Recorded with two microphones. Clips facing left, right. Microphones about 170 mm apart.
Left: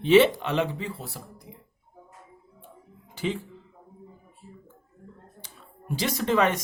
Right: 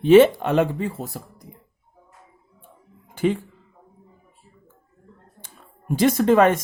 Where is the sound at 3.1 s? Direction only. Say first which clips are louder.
Right 8 dB; 50° right (ahead or behind).